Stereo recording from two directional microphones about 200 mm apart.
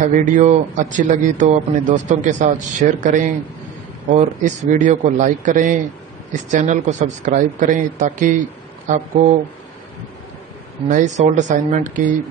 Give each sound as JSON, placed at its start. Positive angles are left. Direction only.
{"t": 0.0, "sound": "speech", "side_deg": -40}
{"t": 10.9, "sound": "speech", "side_deg": -40}